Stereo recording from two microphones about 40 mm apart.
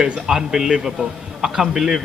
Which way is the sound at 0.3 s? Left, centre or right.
Centre.